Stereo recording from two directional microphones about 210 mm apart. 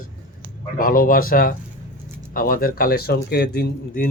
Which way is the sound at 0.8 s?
40° left (ahead or behind).